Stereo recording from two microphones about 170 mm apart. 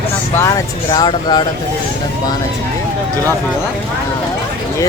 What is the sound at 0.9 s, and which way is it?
Speech, 25° left (ahead or behind).